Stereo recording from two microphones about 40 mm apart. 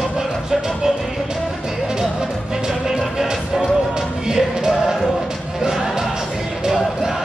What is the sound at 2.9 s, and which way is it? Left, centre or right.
Music, centre.